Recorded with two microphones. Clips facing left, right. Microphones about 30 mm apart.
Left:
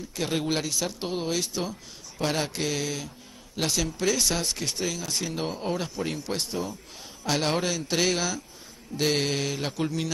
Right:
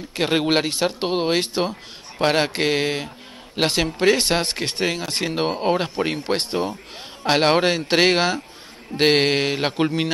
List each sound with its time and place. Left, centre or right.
0.1 s speech: right